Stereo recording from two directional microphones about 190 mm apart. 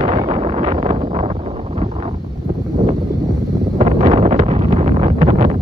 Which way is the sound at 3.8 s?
35° right (ahead or behind).